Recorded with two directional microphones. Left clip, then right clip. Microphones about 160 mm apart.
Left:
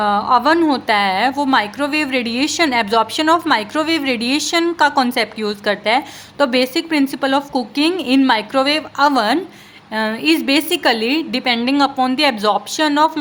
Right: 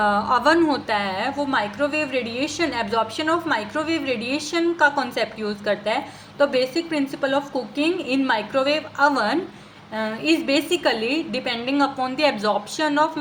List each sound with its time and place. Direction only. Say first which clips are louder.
0.0 s a woman's voice: left 4 dB; 35° left (ahead or behind)